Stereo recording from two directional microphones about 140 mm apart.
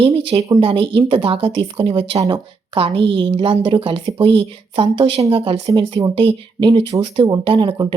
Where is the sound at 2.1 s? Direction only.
25° right (ahead or behind).